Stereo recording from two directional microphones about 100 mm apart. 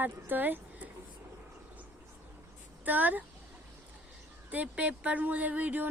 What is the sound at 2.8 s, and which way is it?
Speech, 15° right (ahead or behind).